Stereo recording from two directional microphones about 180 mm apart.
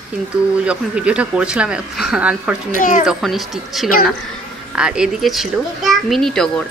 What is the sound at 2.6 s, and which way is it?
Speech, 45° left (ahead or behind).